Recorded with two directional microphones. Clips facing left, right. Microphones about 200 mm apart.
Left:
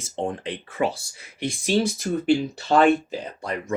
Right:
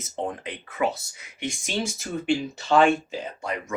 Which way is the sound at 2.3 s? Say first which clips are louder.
Left 2 dB; 40° left (ahead or behind).